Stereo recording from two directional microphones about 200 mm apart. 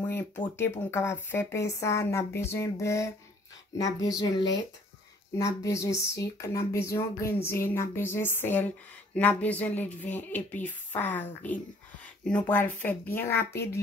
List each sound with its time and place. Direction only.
0.6 s speech: 10° left (ahead or behind)